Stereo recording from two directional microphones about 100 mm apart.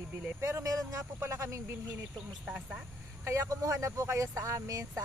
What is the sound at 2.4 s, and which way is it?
Speech, 10° right (ahead or behind).